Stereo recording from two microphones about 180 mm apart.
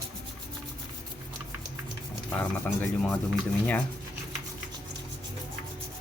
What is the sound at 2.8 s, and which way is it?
Speech, 5° left (ahead or behind).